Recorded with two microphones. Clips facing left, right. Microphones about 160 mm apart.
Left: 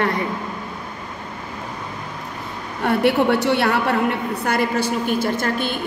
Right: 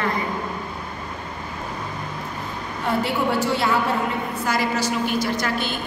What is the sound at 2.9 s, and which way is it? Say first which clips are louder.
A woman's voice: left 5 dB; 65° left (ahead or behind).